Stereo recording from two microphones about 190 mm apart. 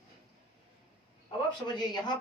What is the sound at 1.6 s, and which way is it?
Speech, 20° left (ahead or behind).